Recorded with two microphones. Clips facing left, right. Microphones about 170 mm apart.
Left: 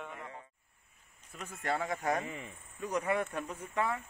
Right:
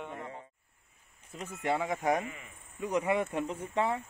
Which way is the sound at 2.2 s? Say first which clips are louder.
Left 1 dB; 30° left (ahead or behind).